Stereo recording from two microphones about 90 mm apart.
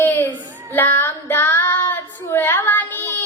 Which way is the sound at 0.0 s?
25° left (ahead or behind).